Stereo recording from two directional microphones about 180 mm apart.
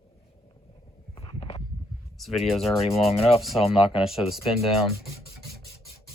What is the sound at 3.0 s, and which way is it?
Speech, 35° left (ahead or behind).